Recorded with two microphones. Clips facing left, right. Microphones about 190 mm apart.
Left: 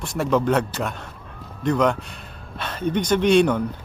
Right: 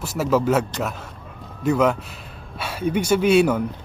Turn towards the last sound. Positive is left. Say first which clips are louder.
# even
turn(degrees=-5)  # may be behind; listen again after turning